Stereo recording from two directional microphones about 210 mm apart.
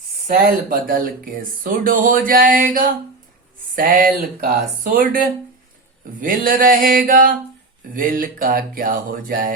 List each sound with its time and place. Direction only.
0.3 s speech: 40° right (ahead or behind)
7.9 s music: 40° right (ahead or behind)